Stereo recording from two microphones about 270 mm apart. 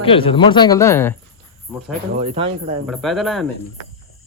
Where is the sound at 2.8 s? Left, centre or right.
Centre.